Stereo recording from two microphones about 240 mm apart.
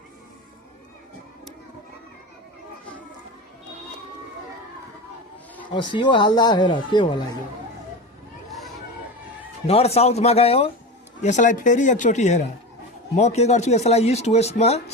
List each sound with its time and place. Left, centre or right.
5.7 s a man's voice: centre
9.6 s a man's voice: left